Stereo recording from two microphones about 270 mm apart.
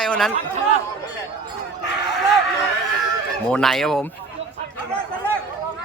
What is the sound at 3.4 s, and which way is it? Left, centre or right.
Speech, centre.